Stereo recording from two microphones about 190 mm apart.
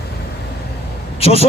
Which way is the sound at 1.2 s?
30° left (ahead or behind).